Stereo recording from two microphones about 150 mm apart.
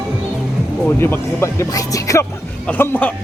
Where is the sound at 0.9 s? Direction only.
15° left (ahead or behind).